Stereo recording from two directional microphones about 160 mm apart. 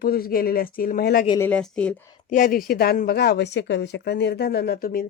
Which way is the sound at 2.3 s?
60° left (ahead or behind).